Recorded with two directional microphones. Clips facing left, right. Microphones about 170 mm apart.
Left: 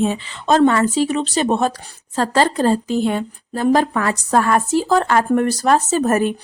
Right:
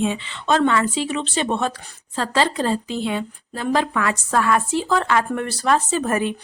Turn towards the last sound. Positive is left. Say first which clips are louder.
# left 5 dB
turn(degrees=40)  # may be behind; listen again after turning